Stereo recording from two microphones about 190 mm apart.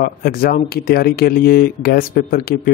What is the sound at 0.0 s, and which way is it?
Speech, 50° left (ahead or behind).